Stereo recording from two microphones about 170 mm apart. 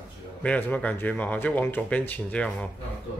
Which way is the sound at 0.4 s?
10° left (ahead or behind).